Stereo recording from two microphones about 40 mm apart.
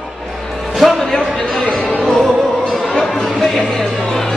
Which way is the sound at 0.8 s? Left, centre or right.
Centre.